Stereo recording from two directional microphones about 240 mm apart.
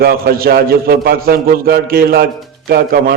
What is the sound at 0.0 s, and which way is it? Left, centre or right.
A man's voice, right.